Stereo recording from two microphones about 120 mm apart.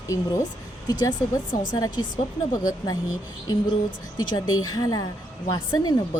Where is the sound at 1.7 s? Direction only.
35° left (ahead or behind).